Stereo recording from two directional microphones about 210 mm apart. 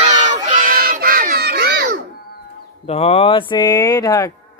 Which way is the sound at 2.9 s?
30° left (ahead or behind).